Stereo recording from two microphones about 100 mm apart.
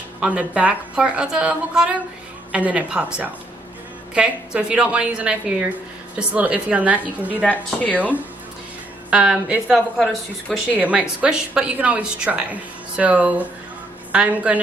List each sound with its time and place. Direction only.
0.2 s a woman's voice: 10° right (ahead or behind)
10.8 s a woman's voice: 15° right (ahead or behind)